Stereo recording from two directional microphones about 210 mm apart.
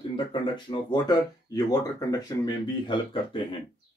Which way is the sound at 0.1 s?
25° left (ahead or behind).